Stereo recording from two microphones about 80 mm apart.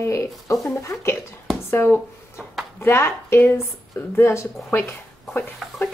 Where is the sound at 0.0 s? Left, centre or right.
Left.